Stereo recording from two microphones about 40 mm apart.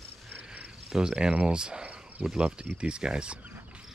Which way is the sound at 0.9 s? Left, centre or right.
Centre.